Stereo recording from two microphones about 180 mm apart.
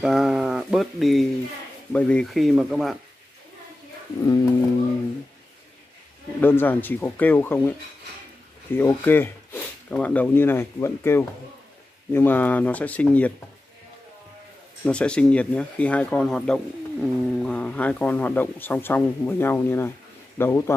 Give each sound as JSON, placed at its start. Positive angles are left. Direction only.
{"t": 0.0, "sound": "speech", "side_deg": -5}
{"t": 4.2, "sound": "speech", "side_deg": 20}
{"t": 6.4, "sound": "speech", "side_deg": 10}
{"t": 8.7, "sound": "speech", "side_deg": 10}
{"t": 14.9, "sound": "speech", "side_deg": 5}